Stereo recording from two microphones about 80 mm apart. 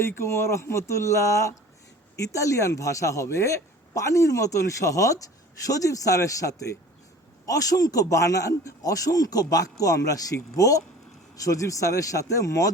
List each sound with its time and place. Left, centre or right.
0.0 s a man's voice: left